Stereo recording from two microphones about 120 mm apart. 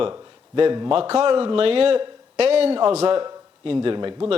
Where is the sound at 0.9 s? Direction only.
50° right (ahead or behind).